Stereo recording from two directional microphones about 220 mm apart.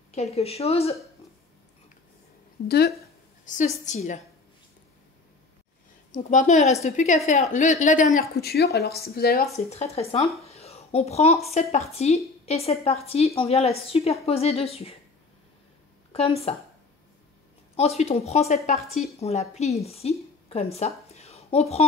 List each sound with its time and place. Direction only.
0.1 s a woman's voice: 30° left (ahead or behind)
3.4 s a woman's voice: 35° left (ahead or behind)
6.1 s a woman's voice: 35° left (ahead or behind)
9.7 s a woman's voice: 30° left (ahead or behind)
16.1 s speech: 25° left (ahead or behind)
17.7 s a woman's voice: 30° left (ahead or behind)